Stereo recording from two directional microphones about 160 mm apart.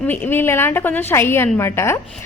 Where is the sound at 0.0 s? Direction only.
10° left (ahead or behind).